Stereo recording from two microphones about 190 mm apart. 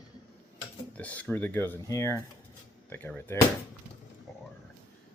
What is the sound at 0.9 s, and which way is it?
Speech, 10° left (ahead or behind).